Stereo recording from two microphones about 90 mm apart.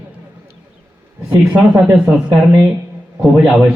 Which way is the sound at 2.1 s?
10° right (ahead or behind).